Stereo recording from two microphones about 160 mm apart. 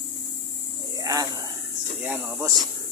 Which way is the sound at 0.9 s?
20° right (ahead or behind).